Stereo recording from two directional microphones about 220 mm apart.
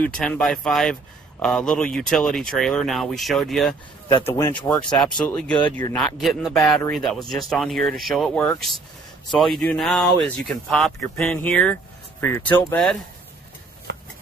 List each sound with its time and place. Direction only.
0.0 s speech: 5° left (ahead or behind)
4.3 s speech: 10° left (ahead or behind)
13.9 s a sound: 50° right (ahead or behind)